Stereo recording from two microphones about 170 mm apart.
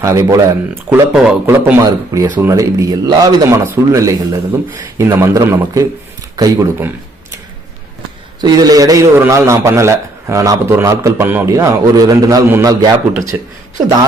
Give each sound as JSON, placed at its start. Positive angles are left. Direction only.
{"t": 0.0, "sound": "a man's voice", "side_deg": -20}
{"t": 0.9, "sound": "a man's voice", "side_deg": -5}
{"t": 1.8, "sound": "a man's voice", "side_deg": -15}
{"t": 8.4, "sound": "a man's voice", "side_deg": -20}